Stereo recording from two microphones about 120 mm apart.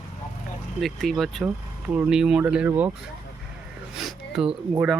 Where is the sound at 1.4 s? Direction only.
10° right (ahead or behind).